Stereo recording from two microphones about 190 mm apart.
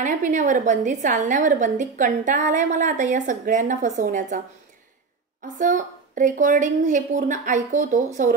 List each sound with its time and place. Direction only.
0.0 s a woman's voice: 40° right (ahead or behind)
5.6 s a woman's voice: 40° right (ahead or behind)